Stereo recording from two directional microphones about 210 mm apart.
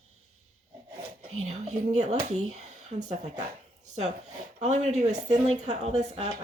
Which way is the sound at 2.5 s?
35° right (ahead or behind).